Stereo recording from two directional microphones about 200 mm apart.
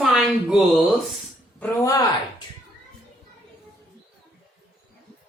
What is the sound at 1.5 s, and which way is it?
Speech, 15° left (ahead or behind).